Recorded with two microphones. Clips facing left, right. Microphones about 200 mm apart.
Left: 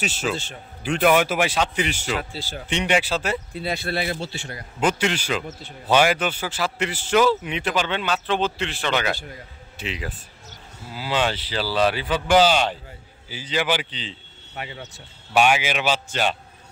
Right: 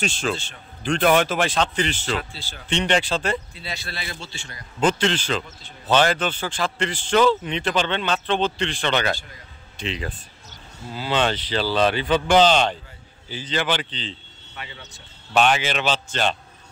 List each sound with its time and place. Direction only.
0.0 s a man's voice: 5° left (ahead or behind)
3.5 s speech: 55° left (ahead or behind)
4.7 s a man's voice: 10° left (ahead or behind)
5.5 s speech: 55° left (ahead or behind)
5.9 s a man's voice: 10° left (ahead or behind)
15.3 s a man's voice: 10° left (ahead or behind)